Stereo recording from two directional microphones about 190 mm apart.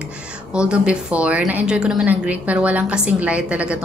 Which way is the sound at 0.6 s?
5° right (ahead or behind).